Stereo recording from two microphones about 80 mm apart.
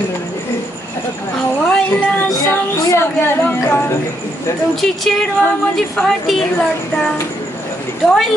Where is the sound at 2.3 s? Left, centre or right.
Left.